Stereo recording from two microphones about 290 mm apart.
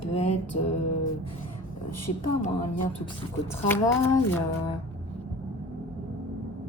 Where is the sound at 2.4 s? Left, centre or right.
Left.